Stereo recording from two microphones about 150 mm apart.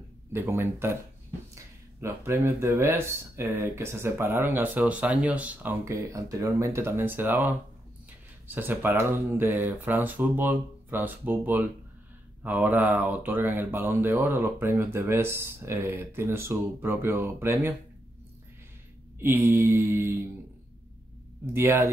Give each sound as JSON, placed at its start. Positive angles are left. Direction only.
{"t": 0.3, "sound": "speech", "side_deg": -15}
{"t": 19.2, "sound": "speech", "side_deg": -15}
{"t": 21.5, "sound": "speech", "side_deg": -15}